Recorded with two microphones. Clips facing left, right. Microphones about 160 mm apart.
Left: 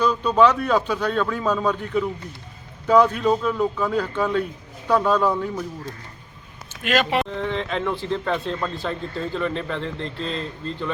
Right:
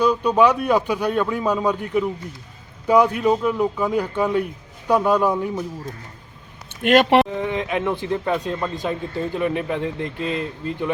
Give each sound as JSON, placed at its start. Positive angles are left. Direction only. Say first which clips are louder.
{"t": 0.0, "sound": "speech", "louder": "right 1 dB", "side_deg": -10}
{"t": 6.8, "sound": "speech", "louder": "right 7 dB", "side_deg": -60}
{"t": 7.3, "sound": "speech", "louder": "right 2 dB", "side_deg": -10}